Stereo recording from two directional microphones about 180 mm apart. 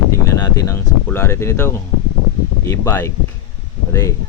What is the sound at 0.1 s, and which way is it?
Speech, 15° left (ahead or behind).